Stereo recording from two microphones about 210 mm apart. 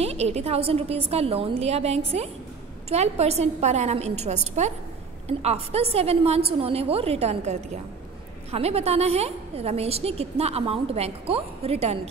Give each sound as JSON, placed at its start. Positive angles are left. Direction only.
{"t": 0.0, "sound": "a woman's voice", "side_deg": -30}